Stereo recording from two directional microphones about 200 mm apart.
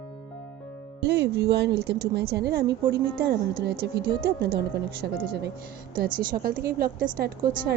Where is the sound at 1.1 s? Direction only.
55° right (ahead or behind).